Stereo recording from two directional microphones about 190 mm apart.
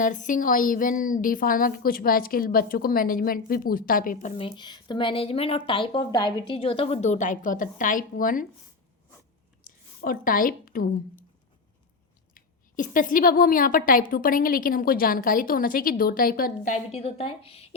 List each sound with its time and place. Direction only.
0.0 s a woman's voice: 40° left (ahead or behind)
9.7 s a sound: 45° left (ahead or behind)
10.0 s a woman's voice: 50° left (ahead or behind)
12.3 s a woman's voice: 45° left (ahead or behind)